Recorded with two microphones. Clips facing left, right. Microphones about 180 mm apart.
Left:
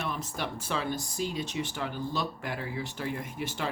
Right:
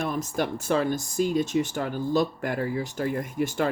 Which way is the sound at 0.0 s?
45° right (ahead or behind).